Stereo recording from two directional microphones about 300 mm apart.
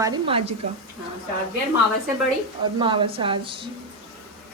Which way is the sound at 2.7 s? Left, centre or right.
Centre.